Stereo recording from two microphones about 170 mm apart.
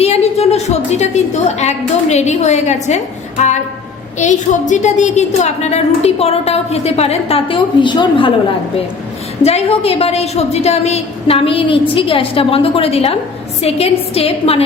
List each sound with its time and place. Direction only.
0.0 s a woman's voice: 40° left (ahead or behind)
9.4 s a woman's voice: 40° left (ahead or behind)